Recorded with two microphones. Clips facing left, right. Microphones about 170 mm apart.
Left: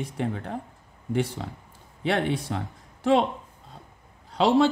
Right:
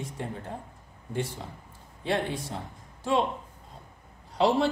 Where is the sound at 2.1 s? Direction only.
70° left (ahead or behind).